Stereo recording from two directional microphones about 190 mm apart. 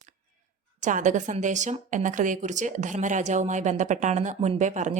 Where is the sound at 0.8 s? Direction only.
40° right (ahead or behind).